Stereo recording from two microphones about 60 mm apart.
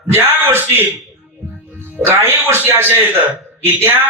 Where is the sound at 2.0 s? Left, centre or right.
Right.